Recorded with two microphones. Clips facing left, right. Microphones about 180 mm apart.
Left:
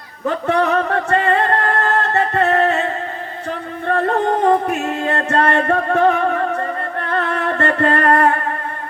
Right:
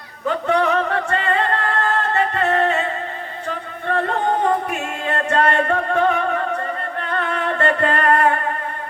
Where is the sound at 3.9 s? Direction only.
40° left (ahead or behind).